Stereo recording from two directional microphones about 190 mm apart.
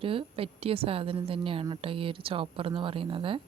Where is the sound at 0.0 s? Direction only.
30° right (ahead or behind).